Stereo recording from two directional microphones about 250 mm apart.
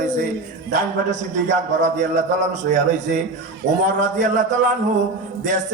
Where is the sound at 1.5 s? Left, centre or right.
Right.